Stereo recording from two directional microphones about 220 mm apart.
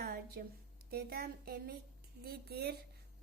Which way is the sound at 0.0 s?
45° right (ahead or behind).